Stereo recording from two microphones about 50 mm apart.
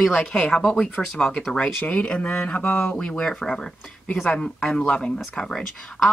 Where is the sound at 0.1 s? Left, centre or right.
Left.